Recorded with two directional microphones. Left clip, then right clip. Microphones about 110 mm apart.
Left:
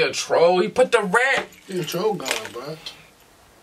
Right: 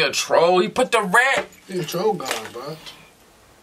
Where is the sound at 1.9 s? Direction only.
5° left (ahead or behind).